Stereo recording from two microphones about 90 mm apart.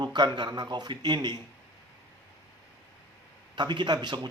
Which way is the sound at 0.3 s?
55° right (ahead or behind).